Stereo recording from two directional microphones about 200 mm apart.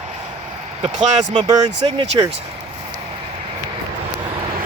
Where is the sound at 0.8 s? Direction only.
30° right (ahead or behind).